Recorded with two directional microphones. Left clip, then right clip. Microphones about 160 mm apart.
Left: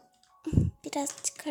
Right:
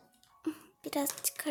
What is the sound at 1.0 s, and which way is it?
Speech, centre (ahead or behind).